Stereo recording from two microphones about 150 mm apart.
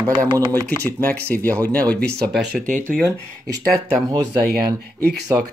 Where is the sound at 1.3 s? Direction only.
10° left (ahead or behind).